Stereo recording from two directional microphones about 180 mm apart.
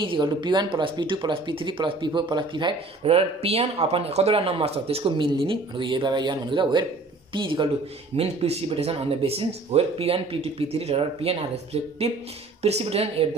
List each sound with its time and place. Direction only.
0.0 s speech: 25° right (ahead or behind)